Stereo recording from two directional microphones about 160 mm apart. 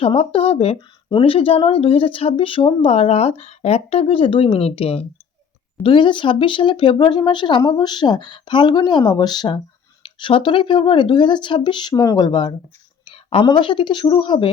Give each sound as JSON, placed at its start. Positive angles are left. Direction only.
{"t": 0.0, "sound": "speech", "side_deg": 35}